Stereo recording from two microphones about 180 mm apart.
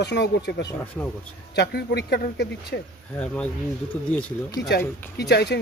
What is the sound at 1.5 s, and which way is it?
Speech, 60° left (ahead or behind).